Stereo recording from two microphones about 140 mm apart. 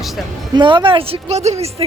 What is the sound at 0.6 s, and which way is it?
A woman's voice, 35° right (ahead or behind).